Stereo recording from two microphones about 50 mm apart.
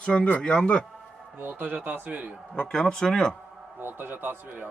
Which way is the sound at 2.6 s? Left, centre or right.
Centre.